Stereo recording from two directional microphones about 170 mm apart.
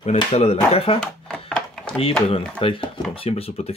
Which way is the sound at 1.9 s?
35° left (ahead or behind).